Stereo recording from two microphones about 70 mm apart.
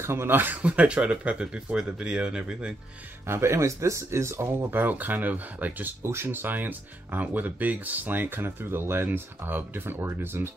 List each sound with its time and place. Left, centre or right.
0.0 s speech: right; by 2.7 s centre
3.3 s speech: right